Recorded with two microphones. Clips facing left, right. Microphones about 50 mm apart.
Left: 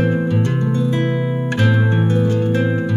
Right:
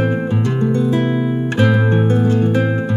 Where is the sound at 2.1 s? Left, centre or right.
Right.